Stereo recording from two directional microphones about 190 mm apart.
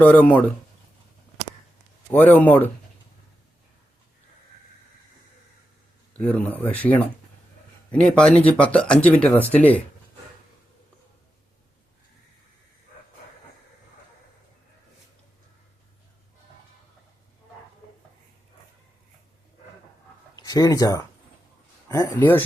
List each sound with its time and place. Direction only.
0.0 s speech: 10° left (ahead or behind)
2.0 s speech: 10° left (ahead or behind)
6.1 s speech: 5° left (ahead or behind)
20.3 s speech: 20° left (ahead or behind)